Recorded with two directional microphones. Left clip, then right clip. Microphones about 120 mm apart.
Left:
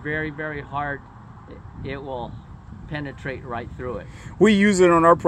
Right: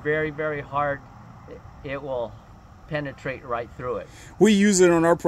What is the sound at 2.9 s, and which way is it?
Speech, 30° left (ahead or behind).